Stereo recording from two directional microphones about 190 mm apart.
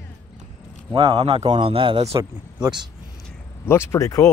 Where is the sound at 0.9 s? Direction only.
30° right (ahead or behind).